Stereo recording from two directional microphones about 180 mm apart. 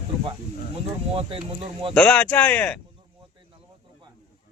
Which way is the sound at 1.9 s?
5° left (ahead or behind).